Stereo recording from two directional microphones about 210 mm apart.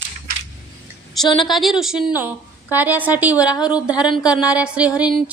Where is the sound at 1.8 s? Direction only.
5° right (ahead or behind).